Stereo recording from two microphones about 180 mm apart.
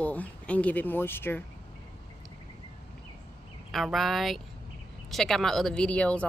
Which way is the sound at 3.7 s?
Centre (ahead or behind).